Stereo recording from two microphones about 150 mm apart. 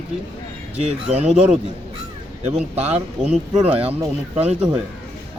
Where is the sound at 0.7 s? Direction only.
45° right (ahead or behind).